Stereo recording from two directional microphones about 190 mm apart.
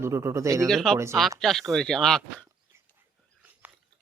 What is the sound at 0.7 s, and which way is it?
Speech, centre (ahead or behind).